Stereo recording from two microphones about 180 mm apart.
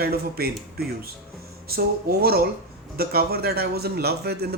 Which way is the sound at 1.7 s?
60° right (ahead or behind).